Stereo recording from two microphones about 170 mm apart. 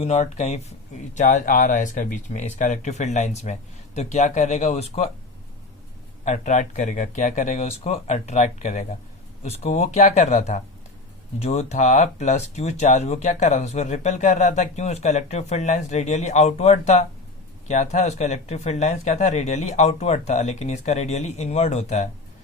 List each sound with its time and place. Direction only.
0.0 s speech: 40° left (ahead or behind)
6.2 s speech: 45° left (ahead or behind)